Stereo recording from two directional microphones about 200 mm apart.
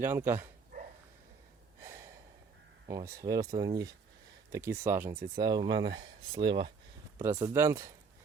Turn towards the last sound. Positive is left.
turn(degrees=-15)  # may be behind; listen again after turning